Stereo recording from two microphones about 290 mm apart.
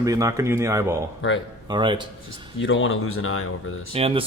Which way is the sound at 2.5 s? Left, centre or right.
Left.